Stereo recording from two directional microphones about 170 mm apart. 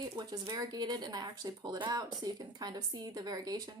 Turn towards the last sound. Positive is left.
turn(degrees=-25)  # may be behind; listen again after turning